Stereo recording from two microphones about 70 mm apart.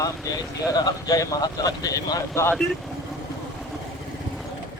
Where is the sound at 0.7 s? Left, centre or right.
Left.